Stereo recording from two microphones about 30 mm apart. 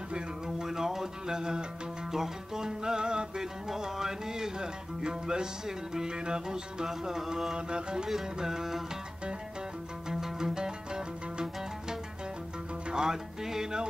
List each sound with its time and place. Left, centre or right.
0.6 s music: centre
3.6 s music: centre
6.9 s music: centre
7.5 s music: right
8.4 s music: centre
10.0 s music: centre
12.9 s speech: right